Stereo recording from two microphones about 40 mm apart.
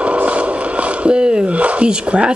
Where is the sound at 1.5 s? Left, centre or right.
Right.